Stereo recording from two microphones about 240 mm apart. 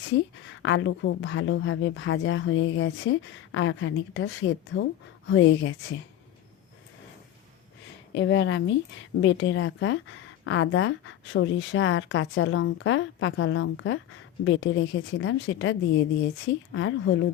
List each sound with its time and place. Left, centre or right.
0.6 s speech: left
8.1 s speech: left